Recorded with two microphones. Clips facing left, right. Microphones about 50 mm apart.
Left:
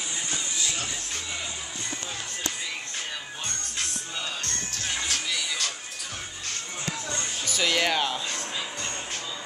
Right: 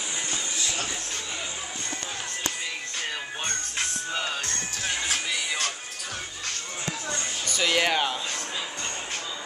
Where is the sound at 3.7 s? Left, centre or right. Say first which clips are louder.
Right 4 dB; right.